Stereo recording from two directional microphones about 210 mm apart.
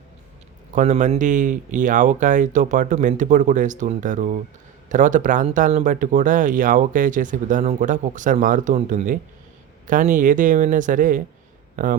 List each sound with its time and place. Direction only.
0.8 s speech: 35° right (ahead or behind)